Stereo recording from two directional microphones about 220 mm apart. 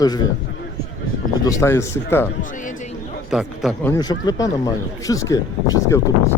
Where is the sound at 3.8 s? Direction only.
15° left (ahead or behind).